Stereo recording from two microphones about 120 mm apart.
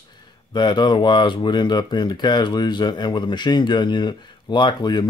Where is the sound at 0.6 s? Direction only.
40° left (ahead or behind).